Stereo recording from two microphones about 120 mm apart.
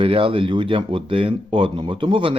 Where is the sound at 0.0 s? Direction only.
50° right (ahead or behind).